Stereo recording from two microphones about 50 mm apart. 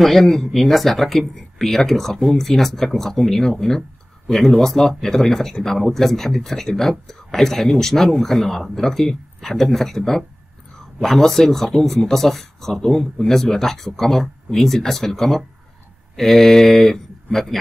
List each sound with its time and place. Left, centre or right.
0.0 s speech: centre